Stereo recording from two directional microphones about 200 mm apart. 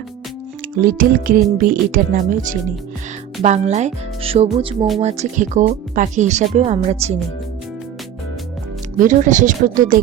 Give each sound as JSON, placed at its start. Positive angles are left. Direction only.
{"t": 0.9, "sound": "speech", "side_deg": -45}
{"t": 9.0, "sound": "speech", "side_deg": -40}